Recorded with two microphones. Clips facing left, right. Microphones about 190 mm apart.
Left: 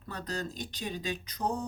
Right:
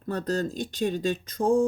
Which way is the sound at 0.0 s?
50° right (ahead or behind).